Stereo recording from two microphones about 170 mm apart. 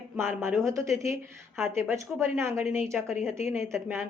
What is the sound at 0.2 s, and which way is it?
Speech, 15° right (ahead or behind).